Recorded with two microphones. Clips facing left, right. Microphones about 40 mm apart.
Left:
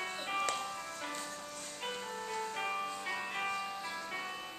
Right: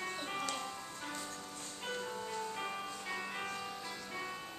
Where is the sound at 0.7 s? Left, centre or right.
Left.